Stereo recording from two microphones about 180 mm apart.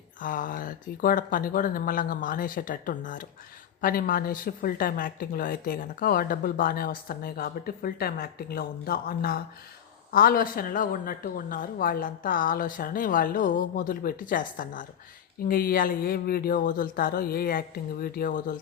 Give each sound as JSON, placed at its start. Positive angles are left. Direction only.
{"t": 0.2, "sound": "a woman's voice", "side_deg": 50}